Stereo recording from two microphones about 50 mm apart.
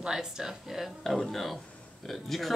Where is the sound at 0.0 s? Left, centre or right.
Centre.